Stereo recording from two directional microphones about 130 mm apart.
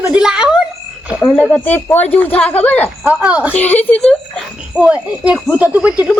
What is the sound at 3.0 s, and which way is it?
Speech, 10° right (ahead or behind).